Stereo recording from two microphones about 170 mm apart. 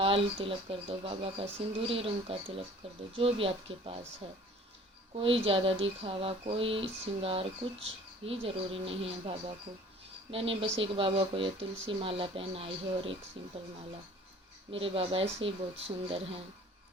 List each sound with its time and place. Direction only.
0.0 s speech: 30° right (ahead or behind)
5.1 s speech: 30° right (ahead or behind)
14.7 s speech: 30° right (ahead or behind)